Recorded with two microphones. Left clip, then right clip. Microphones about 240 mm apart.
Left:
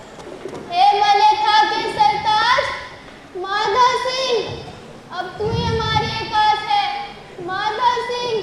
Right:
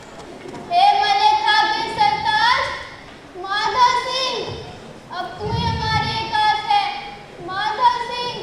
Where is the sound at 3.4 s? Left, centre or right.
Right.